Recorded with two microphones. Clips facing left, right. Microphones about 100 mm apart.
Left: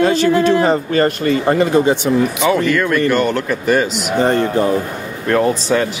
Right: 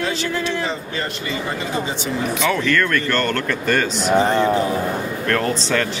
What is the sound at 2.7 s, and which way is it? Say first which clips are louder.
Speech: left 5 dB; 10° left (ahead or behind).